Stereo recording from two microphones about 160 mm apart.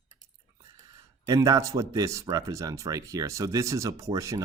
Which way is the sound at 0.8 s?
20° right (ahead or behind).